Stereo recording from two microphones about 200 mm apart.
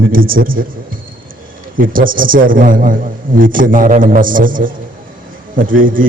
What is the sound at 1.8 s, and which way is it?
A man's voice, 45° right (ahead or behind).